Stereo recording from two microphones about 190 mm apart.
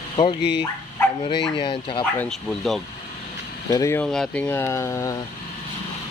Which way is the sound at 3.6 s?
15° left (ahead or behind).